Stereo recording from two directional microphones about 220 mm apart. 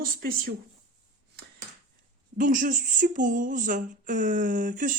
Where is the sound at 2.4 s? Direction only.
35° right (ahead or behind).